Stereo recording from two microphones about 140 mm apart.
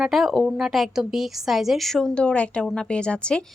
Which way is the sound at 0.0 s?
Centre (ahead or behind).